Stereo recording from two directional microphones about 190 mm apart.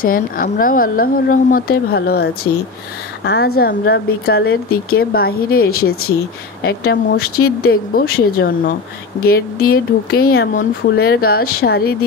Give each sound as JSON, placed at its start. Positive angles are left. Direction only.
{"t": 0.0, "sound": "speech", "side_deg": 50}